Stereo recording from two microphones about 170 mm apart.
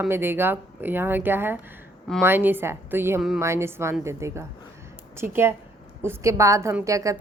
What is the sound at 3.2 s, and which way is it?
Speech, centre (ahead or behind).